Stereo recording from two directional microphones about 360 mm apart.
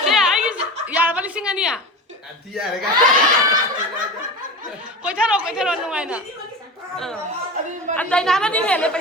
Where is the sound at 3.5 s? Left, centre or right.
Right.